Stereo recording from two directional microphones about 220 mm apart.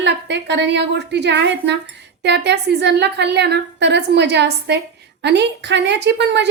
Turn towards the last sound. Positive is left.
turn(degrees=-50)  # may be behind; listen again after turning